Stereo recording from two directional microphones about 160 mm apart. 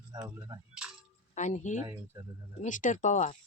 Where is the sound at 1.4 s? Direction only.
50° left (ahead or behind).